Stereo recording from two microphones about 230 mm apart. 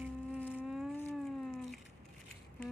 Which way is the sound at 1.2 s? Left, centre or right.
Centre.